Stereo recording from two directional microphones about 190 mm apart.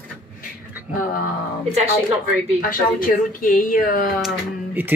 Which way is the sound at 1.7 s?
35° right (ahead or behind).